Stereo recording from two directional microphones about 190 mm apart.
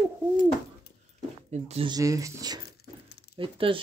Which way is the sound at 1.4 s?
35° right (ahead or behind).